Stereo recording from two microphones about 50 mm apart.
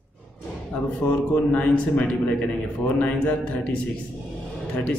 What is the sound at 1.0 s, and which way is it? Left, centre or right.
A man's voice, left.